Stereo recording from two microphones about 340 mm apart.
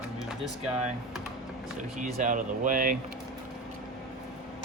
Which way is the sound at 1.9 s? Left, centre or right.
Right.